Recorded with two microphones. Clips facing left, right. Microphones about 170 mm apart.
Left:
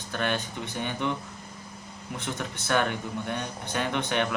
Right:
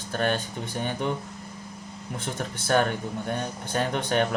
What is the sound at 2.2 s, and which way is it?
Speech, 45° right (ahead or behind).